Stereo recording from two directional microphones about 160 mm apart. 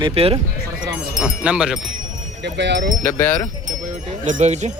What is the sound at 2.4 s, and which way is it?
Speech, 90° right.